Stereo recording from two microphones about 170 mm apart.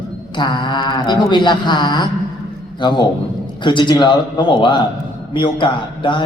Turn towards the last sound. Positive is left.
turn(degrees=30)  # may be behind; listen again after turning